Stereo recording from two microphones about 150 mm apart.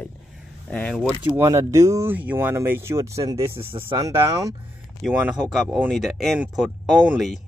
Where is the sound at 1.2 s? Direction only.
15° right (ahead or behind).